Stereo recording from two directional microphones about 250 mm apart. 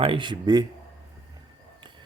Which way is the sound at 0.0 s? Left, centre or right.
Centre.